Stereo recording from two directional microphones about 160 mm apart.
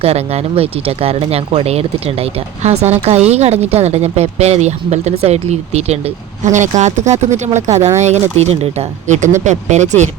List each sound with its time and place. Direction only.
0.0 s speech: 40° right (ahead or behind)